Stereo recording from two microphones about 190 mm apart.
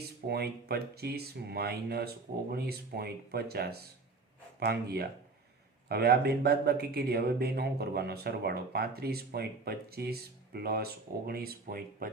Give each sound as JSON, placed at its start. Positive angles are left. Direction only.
{"t": 0.3, "sound": "speech", "side_deg": -55}